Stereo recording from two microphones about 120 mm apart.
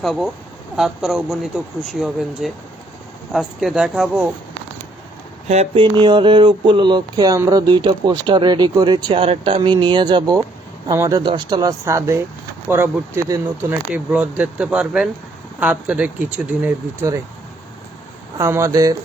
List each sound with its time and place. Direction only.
0.0 s speech: centre (ahead or behind)
5.7 s speech: 40° right (ahead or behind)
11.2 s speech: 40° right (ahead or behind); by 13.2 s 20° right (ahead or behind)
13.2 s speech: 30° right (ahead or behind)
13.7 s speech: 10° right (ahead or behind)
18.3 s speech: 20° right (ahead or behind)